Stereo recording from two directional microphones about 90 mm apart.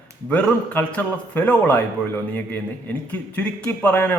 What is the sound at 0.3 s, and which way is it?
A man's voice, 20° left (ahead or behind).